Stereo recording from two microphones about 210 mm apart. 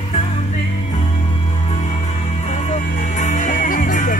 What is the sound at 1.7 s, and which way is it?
Music, 35° left (ahead or behind).